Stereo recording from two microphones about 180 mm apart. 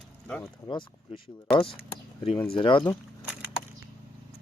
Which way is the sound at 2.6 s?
25° left (ahead or behind).